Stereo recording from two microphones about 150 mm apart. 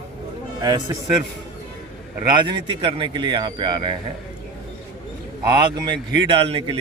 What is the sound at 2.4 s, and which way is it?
Speech, 35° right (ahead or behind).